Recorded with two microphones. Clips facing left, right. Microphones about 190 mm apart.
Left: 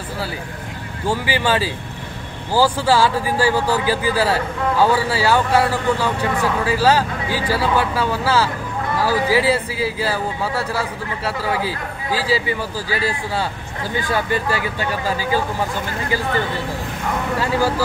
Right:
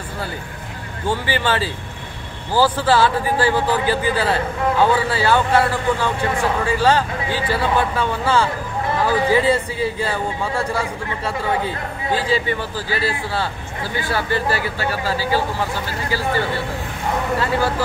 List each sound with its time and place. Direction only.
1.0 s a man's voice: 10° left (ahead or behind)
17.4 s a man's voice: 10° left (ahead or behind)